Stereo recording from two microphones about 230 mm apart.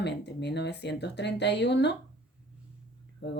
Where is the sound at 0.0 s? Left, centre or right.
Left.